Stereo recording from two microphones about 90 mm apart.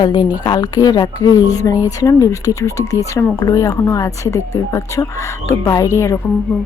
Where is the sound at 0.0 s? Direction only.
60° left (ahead or behind).